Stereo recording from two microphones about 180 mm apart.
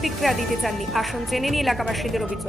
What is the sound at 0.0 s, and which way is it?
A woman's voice, centre (ahead or behind).